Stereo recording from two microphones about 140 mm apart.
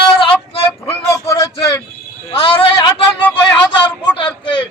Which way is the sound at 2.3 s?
40° left (ahead or behind).